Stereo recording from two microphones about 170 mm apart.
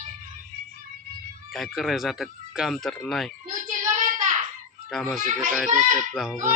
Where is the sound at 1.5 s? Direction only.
Centre (ahead or behind).